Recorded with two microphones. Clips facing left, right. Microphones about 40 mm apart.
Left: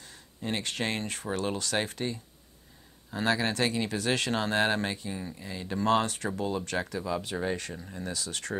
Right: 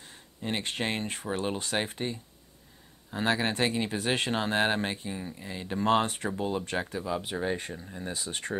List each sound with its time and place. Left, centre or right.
0.4 s speech: right
3.2 s speech: right
7.7 s speech: centre
8.0 s speech: right